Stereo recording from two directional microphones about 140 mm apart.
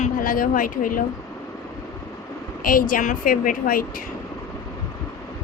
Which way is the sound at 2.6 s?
90° left.